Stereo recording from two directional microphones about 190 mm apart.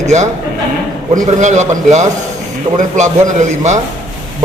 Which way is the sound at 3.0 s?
40° right (ahead or behind).